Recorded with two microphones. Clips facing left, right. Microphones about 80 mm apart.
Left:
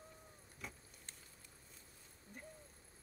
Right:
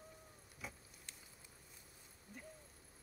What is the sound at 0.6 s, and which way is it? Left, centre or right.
Vehicle, centre.